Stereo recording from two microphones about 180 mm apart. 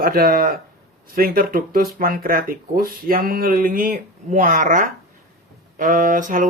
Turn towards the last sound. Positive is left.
turn(degrees=-45)  # may be behind; listen again after turning